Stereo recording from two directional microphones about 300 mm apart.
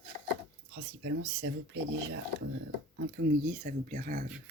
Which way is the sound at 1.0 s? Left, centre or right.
Right.